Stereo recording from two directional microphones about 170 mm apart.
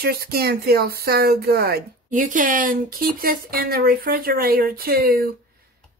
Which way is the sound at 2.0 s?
50° right (ahead or behind).